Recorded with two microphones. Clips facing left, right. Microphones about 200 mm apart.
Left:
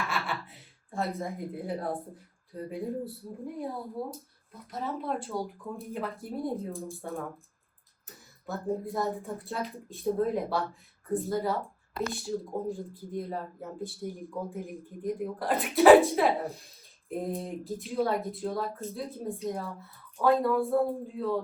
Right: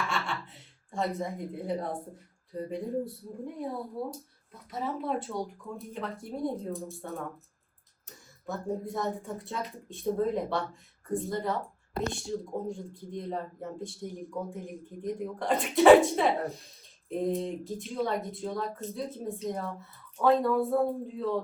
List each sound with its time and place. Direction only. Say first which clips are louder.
0.1 s speech: even; 5° left (ahead or behind)